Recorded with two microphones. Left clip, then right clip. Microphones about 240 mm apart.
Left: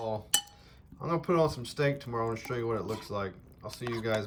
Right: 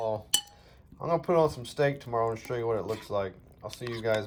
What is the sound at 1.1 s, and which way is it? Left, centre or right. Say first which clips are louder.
Speech: right 3 dB; centre.